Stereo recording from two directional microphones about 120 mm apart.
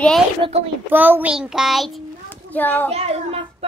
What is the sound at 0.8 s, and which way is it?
Speech, 15° right (ahead or behind).